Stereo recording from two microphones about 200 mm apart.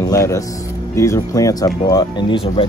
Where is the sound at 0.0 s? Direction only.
15° left (ahead or behind).